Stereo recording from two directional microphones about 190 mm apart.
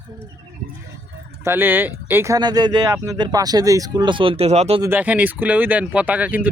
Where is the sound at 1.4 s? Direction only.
10° right (ahead or behind); by 4.8 s 35° right (ahead or behind).